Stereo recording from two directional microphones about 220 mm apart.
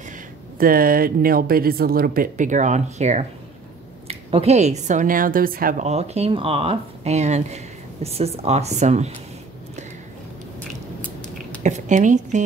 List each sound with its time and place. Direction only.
0.6 s speech: 40° right (ahead or behind)
11.6 s speech: 35° right (ahead or behind)